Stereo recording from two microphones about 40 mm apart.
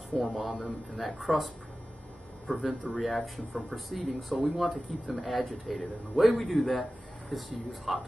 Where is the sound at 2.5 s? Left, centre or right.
Left.